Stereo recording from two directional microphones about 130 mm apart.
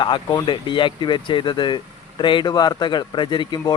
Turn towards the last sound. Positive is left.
turn(degrees=35)  # may be behind; listen again after turning